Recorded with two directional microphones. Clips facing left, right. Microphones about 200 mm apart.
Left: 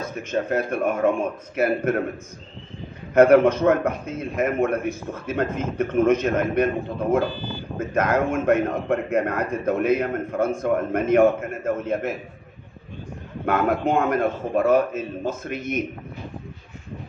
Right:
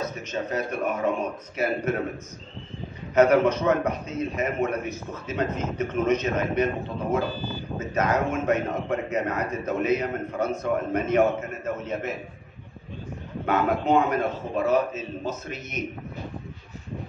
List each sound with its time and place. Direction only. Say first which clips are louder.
0.0 s a man's voice: left 4 dB; 50° left (ahead or behind)
3.2 s a man's voice: left 4 dB; 55° left (ahead or behind)
13.5 s a man's voice: left 1 dB; 55° left (ahead or behind)